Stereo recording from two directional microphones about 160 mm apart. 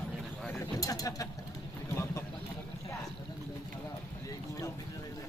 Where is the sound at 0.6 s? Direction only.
20° left (ahead or behind).